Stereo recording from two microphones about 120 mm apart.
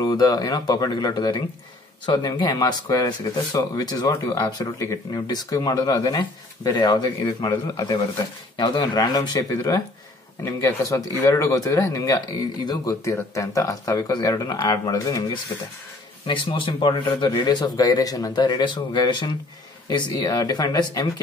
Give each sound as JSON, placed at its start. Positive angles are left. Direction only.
{"t": 0.0, "sound": "speech", "side_deg": 30}
{"t": 16.3, "sound": "speech", "side_deg": 45}